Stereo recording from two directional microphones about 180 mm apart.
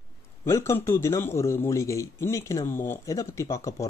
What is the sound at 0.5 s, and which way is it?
A man's voice, 15° left (ahead or behind).